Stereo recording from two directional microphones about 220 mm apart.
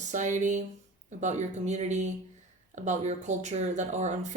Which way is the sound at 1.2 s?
30° right (ahead or behind).